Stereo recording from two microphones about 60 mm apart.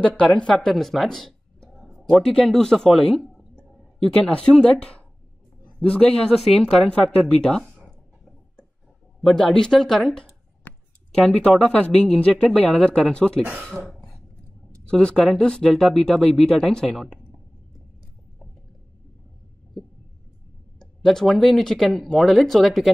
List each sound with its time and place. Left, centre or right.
0.2 s speech: centre
4.3 s speech: centre
6.3 s speech: centre
9.2 s speech: centre
20.8 s speech: centre